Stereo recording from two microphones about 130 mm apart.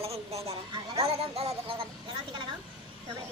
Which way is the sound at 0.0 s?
50° right (ahead or behind).